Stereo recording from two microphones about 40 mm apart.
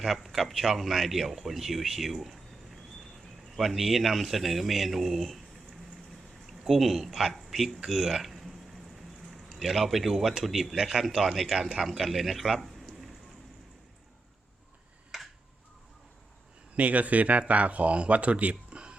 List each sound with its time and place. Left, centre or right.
0.0 s speech: centre
6.7 s speech: centre
15.1 s a sound: centre
16.7 s speech: right